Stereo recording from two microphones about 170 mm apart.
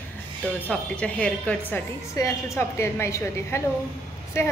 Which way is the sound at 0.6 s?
10° left (ahead or behind).